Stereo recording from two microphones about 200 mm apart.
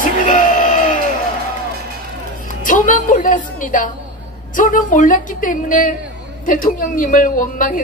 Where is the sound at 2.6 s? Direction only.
40° left (ahead or behind).